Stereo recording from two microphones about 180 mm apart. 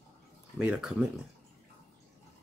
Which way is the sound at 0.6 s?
5° right (ahead or behind).